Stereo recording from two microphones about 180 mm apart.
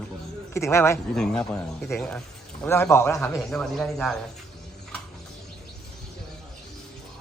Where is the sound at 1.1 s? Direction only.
5° left (ahead or behind).